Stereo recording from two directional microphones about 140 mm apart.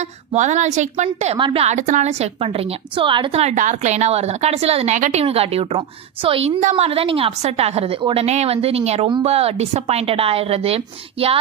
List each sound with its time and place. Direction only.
0.3 s a woman's voice: 55° right (ahead or behind)
1.8 s a woman's voice: 60° right (ahead or behind); by 3.4 s 35° right (ahead or behind)
3.4 s a woman's voice: 60° right (ahead or behind)
5.2 s a woman's voice: 45° right (ahead or behind)